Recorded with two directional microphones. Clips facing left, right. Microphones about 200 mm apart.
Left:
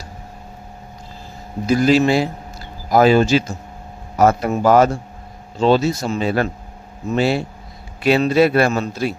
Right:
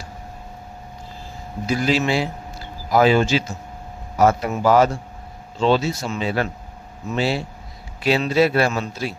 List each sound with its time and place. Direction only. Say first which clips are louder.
1.6 s a man's voice: left 6 dB; 45° left (ahead or behind)